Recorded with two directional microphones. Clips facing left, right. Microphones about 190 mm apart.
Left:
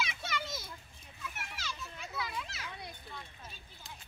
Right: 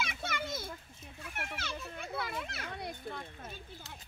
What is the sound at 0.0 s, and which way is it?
Children playing, 50° right (ahead or behind).